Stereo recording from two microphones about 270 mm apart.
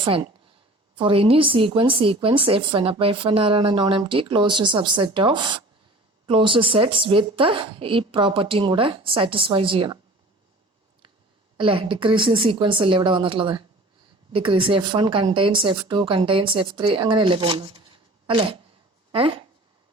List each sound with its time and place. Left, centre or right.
0.0 s a woman's voice: centre
11.5 s a woman's voice: centre